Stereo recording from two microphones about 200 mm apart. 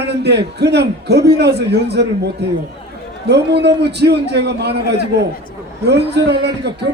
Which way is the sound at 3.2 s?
55° right (ahead or behind).